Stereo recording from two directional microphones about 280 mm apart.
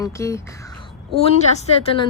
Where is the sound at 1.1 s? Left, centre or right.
Left.